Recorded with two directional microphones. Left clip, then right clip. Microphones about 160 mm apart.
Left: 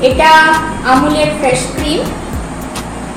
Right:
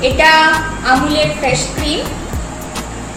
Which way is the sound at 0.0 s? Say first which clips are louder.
Left 3 dB; 5° right (ahead or behind).